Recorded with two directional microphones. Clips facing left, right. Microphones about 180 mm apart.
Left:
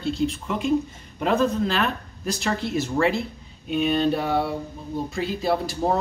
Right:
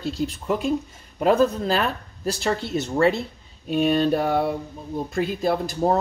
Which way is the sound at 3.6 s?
40° right (ahead or behind).